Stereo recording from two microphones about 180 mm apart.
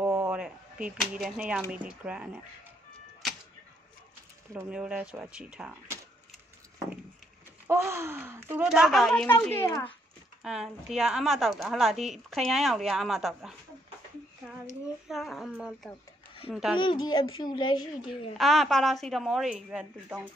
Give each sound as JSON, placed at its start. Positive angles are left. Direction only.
{"t": 0.0, "sound": "a sound", "side_deg": -10}
{"t": 1.7, "sound": "a woman's voice", "side_deg": -5}
{"t": 4.6, "sound": "speech", "side_deg": -5}
{"t": 7.6, "sound": "a woman's voice", "side_deg": -15}
{"t": 10.4, "sound": "a woman's voice", "side_deg": 0}
{"t": 15.0, "sound": "a woman's voice", "side_deg": 0}
{"t": 16.7, "sound": "a woman's voice", "side_deg": 25}
{"t": 18.4, "sound": "a woman's voice", "side_deg": 0}